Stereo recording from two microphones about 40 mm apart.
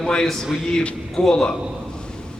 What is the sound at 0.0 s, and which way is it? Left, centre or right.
Speech, centre.